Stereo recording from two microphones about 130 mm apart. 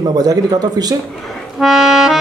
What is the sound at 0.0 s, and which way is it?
Speech, 30° right (ahead or behind).